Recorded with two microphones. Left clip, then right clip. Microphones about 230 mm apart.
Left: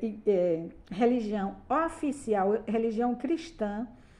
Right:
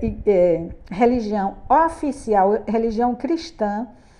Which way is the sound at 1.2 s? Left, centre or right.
Centre.